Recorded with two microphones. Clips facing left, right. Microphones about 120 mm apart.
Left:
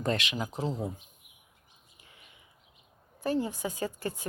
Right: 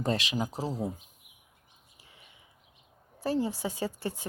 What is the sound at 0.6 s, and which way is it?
Speech, 10° right (ahead or behind).